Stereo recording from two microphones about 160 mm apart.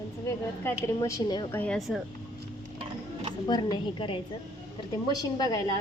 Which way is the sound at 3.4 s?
30° left (ahead or behind).